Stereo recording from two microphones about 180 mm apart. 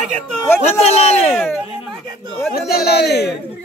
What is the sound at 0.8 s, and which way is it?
Speech, 35° left (ahead or behind).